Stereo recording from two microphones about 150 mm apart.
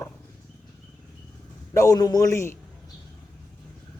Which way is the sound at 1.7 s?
20° left (ahead or behind).